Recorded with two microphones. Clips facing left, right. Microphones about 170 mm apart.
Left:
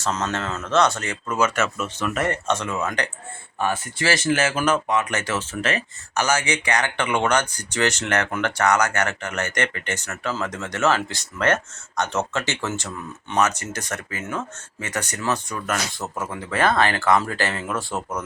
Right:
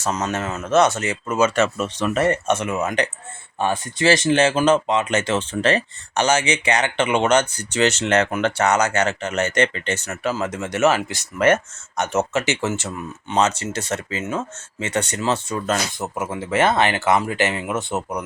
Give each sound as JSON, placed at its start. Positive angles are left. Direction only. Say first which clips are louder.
{"t": 0.0, "sound": "speech", "louder": "right 2 dB", "side_deg": -15}